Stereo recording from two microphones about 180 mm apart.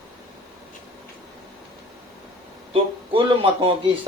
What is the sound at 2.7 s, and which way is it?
Speech, 30° right (ahead or behind).